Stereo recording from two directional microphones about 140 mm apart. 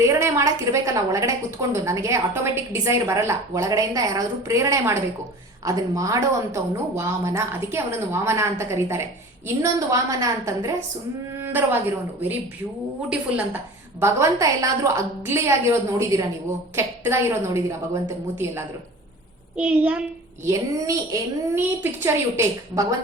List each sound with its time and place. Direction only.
0.0 s a woman's voice: 20° right (ahead or behind)
11.3 s a sound: 15° right (ahead or behind)
13.1 s a woman's voice: 10° right (ahead or behind)
14.0 s a woman's voice: 20° right (ahead or behind)
19.5 s a woman's voice: 10° right (ahead or behind)
20.4 s a woman's voice: 25° right (ahead or behind)